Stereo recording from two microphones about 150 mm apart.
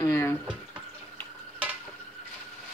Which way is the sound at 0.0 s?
15° left (ahead or behind).